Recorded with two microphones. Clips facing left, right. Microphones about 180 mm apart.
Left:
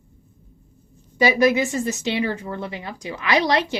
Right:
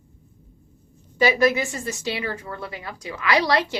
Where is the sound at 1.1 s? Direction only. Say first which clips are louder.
Left 2 dB; 15° left (ahead or behind).